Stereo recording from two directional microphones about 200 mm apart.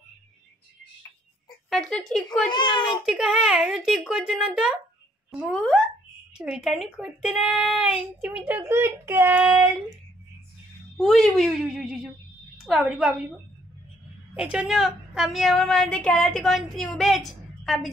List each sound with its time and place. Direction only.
1.7 s speech: 5° left (ahead or behind)
2.5 s a child's voice: 25° left (ahead or behind)
3.1 s speech: 5° right (ahead or behind)
11.0 s speech: centre (ahead or behind)
14.3 s speech: 5° right (ahead or behind)